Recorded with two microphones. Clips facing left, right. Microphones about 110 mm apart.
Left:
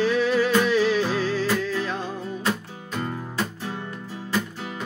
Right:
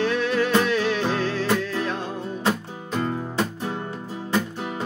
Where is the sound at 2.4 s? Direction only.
30° right (ahead or behind).